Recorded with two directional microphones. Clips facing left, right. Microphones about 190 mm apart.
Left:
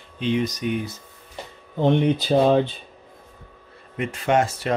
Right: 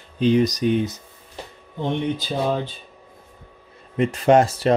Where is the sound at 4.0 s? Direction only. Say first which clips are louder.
Right 5 dB; 35° right (ahead or behind).